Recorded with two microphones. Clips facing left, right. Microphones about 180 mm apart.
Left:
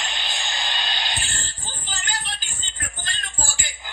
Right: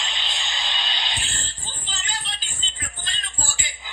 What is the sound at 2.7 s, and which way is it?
Music, 55° left (ahead or behind).